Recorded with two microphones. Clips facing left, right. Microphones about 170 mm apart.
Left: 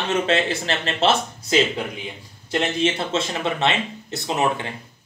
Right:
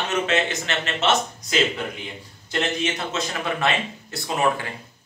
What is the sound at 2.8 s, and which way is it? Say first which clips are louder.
Speech: left 4 dB; 30° left (ahead or behind).